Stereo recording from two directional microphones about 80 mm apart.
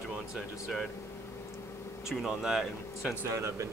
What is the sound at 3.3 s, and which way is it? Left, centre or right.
Speech, right.